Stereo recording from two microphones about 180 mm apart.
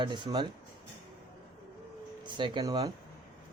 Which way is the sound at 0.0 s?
25° right (ahead or behind).